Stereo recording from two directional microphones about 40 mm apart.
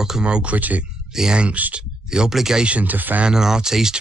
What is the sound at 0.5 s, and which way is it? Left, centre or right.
Speech, right.